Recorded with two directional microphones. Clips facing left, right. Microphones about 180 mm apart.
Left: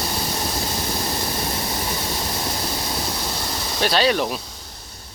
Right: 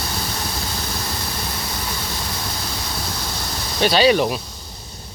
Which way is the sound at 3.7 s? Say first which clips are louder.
Right 4 dB; centre (ahead or behind).